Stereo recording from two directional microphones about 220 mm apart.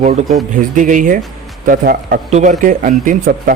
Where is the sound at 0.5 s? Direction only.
35° right (ahead or behind).